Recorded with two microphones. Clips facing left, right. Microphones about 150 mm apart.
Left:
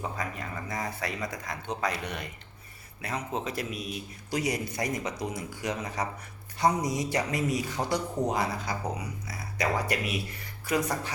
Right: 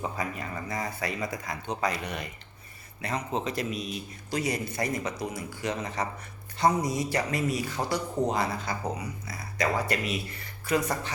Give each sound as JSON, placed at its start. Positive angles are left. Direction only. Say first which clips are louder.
{"t": 0.2, "sound": "a man's voice", "louder": "right 2 dB", "side_deg": 0}